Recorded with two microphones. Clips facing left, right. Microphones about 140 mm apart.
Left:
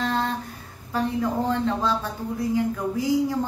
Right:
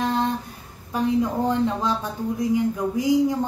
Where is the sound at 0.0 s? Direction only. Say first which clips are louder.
Right 2 dB; 20° right (ahead or behind).